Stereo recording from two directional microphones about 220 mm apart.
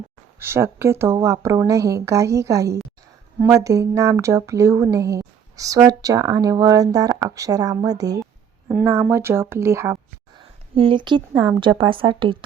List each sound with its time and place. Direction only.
0.3 s speech: 10° right (ahead or behind)
10.8 s speech: 25° right (ahead or behind)